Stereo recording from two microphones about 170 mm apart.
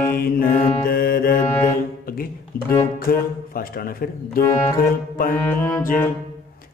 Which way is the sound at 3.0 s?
60° left (ahead or behind).